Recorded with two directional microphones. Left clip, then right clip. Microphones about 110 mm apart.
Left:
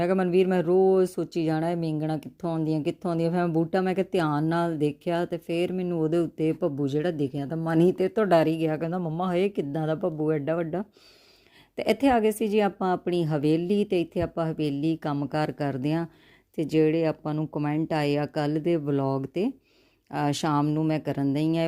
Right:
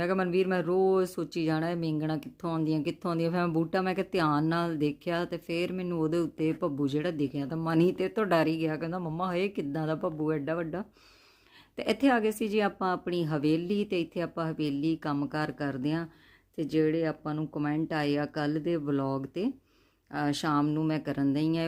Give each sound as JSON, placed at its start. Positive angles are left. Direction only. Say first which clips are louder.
{"t": 0.0, "sound": "a woman's voice", "louder": "left 5 dB", "side_deg": 35}
{"t": 20.7, "sound": "a woman's voice", "louder": "left 4 dB", "side_deg": 45}